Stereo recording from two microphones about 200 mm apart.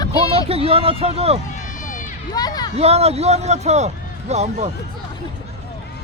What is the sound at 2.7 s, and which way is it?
A man's voice, 30° right (ahead or behind).